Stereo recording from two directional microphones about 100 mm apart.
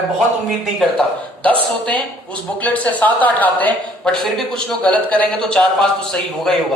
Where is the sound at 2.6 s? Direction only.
15° left (ahead or behind).